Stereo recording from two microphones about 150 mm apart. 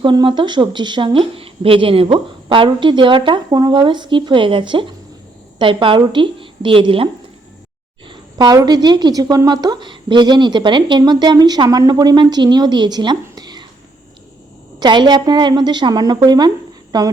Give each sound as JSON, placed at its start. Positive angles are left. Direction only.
{"t": 0.0, "sound": "a woman's voice", "side_deg": -30}
{"t": 14.8, "sound": "a woman's voice", "side_deg": -30}